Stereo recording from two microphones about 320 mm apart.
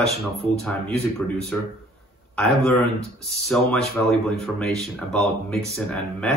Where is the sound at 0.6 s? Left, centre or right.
Centre.